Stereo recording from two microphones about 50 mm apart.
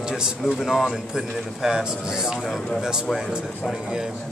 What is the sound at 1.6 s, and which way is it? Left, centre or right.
Speech, centre.